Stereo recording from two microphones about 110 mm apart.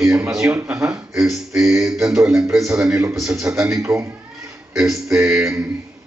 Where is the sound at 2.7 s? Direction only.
5° right (ahead or behind).